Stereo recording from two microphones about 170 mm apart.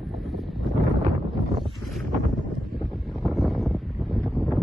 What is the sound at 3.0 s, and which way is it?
Wind noise, centre (ahead or behind).